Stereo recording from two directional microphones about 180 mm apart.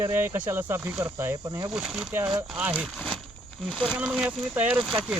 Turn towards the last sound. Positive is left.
turn(degrees=-5)  # may be behind; listen again after turning